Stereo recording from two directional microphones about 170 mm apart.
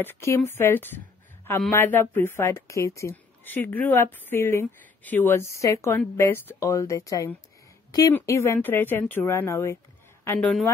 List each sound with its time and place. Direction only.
0.0 s speech: 15° left (ahead or behind)